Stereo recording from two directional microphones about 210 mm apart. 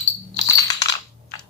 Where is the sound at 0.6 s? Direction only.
20° left (ahead or behind).